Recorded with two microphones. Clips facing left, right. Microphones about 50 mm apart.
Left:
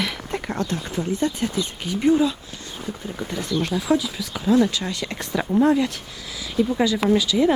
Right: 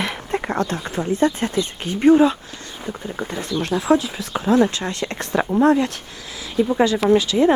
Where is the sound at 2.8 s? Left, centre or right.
Right.